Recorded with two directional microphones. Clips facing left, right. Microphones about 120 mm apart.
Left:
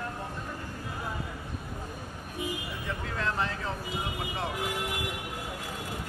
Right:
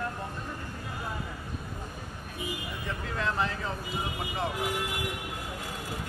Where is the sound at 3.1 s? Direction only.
Centre (ahead or behind).